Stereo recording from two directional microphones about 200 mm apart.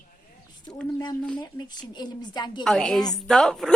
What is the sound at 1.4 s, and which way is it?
A woman's voice, 20° left (ahead or behind).